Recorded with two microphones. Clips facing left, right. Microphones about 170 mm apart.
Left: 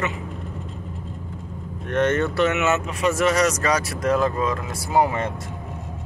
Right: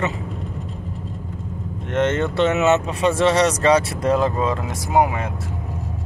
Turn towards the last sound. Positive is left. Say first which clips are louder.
# right 2 dB
turn(degrees=-15)  # may be behind; listen again after turning